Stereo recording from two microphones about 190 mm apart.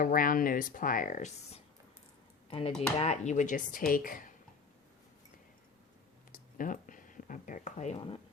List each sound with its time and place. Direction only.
0.0 s speech: 50° left (ahead or behind)
6.3 s speech: 45° left (ahead or behind); by 8.2 s 30° left (ahead or behind)